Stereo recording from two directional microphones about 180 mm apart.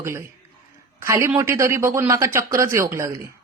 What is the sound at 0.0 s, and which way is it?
Speech, 15° right (ahead or behind).